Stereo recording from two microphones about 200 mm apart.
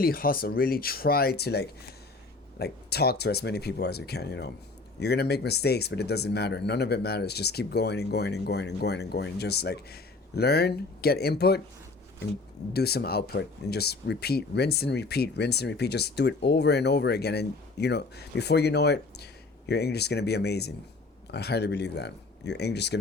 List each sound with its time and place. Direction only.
0.0 s speech: 45° left (ahead or behind)
12.7 s speech: 50° left (ahead or behind)